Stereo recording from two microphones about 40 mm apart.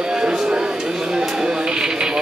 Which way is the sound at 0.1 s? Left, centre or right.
Centre.